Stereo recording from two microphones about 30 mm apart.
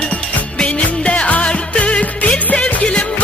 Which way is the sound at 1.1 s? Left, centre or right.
Left.